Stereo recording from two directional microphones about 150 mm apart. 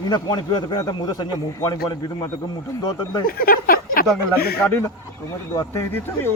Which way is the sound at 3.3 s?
75° left (ahead or behind).